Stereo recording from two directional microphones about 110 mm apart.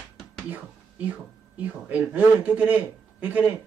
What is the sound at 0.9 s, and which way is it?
Speech, 15° right (ahead or behind).